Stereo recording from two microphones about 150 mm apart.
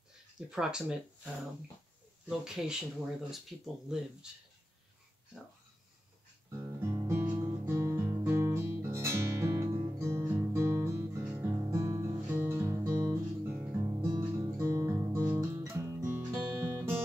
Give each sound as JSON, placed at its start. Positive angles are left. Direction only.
{"t": 0.5, "sound": "speech", "side_deg": -5}
{"t": 3.9, "sound": "speech", "side_deg": -5}
{"t": 6.6, "sound": "guitar", "side_deg": -20}